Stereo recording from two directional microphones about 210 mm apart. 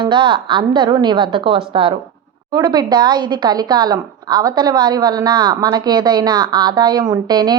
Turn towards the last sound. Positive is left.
turn(degrees=-20)  # may be behind; listen again after turning